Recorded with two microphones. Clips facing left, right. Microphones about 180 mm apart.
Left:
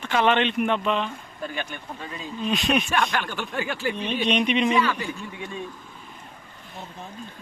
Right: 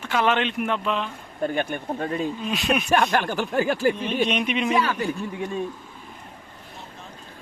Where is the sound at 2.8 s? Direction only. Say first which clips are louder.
Right 5 dB; 40° right (ahead or behind).